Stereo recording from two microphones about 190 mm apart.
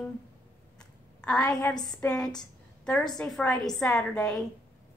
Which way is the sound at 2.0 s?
5° left (ahead or behind).